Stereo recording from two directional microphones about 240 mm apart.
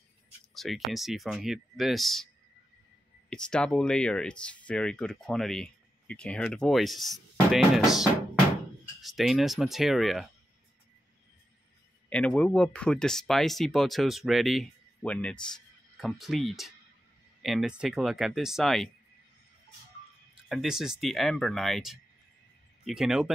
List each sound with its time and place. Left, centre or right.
0.6 s speech: centre
3.3 s speech: centre
12.1 s speech: centre
20.4 s speech: centre